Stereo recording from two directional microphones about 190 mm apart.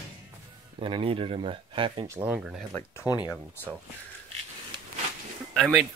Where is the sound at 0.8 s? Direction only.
30° right (ahead or behind).